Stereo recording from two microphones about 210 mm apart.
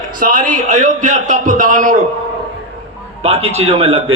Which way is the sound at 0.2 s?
35° right (ahead or behind).